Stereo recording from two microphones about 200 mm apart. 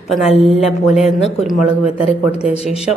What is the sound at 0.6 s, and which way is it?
Speech, 30° left (ahead or behind).